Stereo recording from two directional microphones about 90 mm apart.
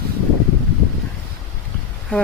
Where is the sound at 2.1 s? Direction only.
15° left (ahead or behind).